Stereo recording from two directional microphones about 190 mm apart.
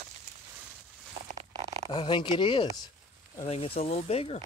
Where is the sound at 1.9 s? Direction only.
25° left (ahead or behind).